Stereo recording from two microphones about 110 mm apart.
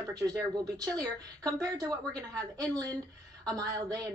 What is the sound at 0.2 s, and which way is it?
Speech, 35° right (ahead or behind).